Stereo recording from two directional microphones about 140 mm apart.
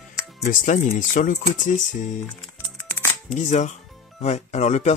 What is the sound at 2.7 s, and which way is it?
Music, 15° left (ahead or behind).